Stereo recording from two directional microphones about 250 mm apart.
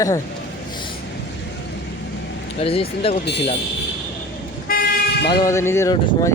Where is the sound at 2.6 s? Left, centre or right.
Left.